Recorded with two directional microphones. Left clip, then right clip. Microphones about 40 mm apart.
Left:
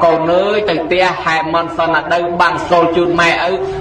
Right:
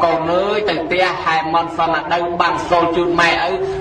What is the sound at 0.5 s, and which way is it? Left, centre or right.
A man's voice, left.